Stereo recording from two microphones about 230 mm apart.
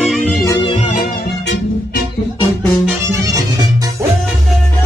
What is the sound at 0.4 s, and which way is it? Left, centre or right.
Music, centre.